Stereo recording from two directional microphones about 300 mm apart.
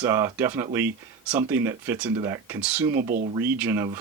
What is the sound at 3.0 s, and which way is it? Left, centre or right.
Speech, right.